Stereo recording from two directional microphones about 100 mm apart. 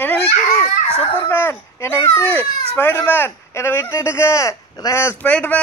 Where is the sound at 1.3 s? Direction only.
20° left (ahead or behind).